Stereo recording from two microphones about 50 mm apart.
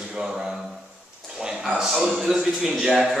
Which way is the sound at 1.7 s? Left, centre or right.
Centre.